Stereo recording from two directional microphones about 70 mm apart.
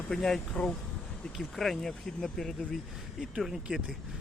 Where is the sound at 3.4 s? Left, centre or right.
Centre.